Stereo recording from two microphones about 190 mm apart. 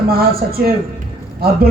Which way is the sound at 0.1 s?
55° right (ahead or behind).